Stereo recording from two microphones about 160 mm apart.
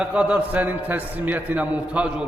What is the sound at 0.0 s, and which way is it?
A man's voice, 5° right (ahead or behind).